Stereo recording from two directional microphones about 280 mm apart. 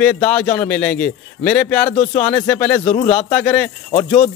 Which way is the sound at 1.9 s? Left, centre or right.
Left.